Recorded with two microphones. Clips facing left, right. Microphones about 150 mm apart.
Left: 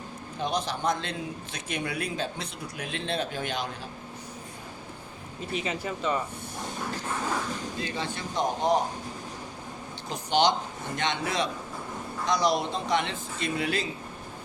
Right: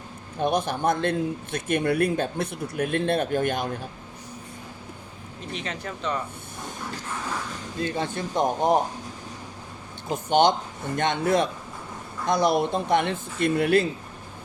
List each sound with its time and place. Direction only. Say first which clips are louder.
0.3 s speech: right 6 dB; 55° right (ahead or behind)
5.5 s speech: left 2 dB; 5° left (ahead or behind)
7.8 s speech: right 10 dB; 50° right (ahead or behind)
10.1 s speech: right 4 dB; 50° right (ahead or behind)